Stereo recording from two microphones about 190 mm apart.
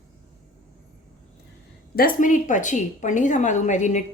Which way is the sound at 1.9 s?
45° left (ahead or behind).